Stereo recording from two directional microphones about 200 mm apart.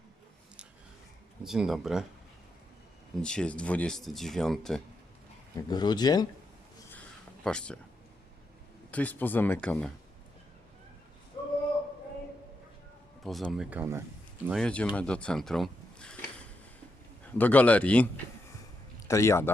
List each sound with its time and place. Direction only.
1.5 s speech: centre (ahead or behind)
3.2 s speech: 5° left (ahead or behind)
5.5 s speech: 20° left (ahead or behind)
7.4 s speech: 5° left (ahead or behind)
8.9 s speech: 10° left (ahead or behind)
13.2 s speech: centre (ahead or behind)
14.4 s speech: centre (ahead or behind)